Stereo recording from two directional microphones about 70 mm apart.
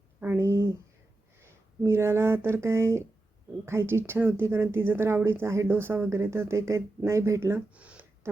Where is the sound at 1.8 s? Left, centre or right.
Right.